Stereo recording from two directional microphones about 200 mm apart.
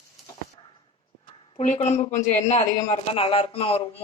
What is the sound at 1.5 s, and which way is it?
A man's voice, 35° left (ahead or behind).